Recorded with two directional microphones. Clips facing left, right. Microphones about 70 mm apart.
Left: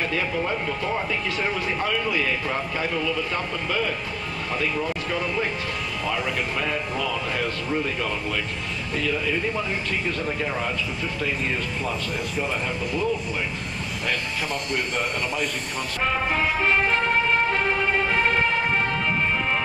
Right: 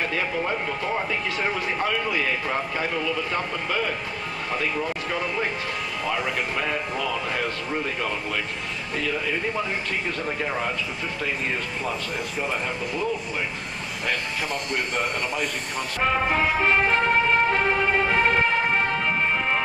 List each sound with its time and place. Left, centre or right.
0.1 s speech: right
14.0 s speech: right
16.0 s music: right